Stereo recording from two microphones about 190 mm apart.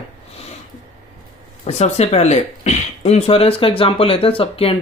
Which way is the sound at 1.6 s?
35° left (ahead or behind).